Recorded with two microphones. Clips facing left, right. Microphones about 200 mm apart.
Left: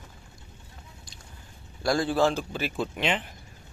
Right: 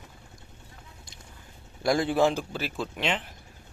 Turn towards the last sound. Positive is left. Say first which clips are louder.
# left 2 dB
turn(degrees=0)  # may be behind; listen again after turning